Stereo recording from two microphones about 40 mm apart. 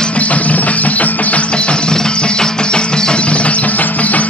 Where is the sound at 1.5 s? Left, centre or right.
Left.